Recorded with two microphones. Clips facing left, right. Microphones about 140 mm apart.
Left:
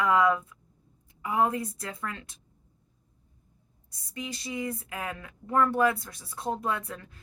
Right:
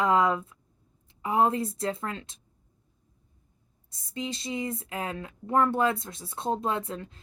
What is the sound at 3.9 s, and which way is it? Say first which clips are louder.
A woman's voice: right 4 dB; 25° right (ahead or behind).